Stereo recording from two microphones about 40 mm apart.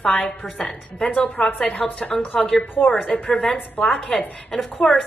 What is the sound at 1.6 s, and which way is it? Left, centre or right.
Speech, left.